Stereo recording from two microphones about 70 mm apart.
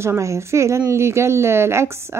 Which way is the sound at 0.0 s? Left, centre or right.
Right.